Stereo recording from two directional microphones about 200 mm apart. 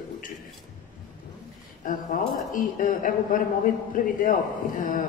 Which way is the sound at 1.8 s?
40° left (ahead or behind).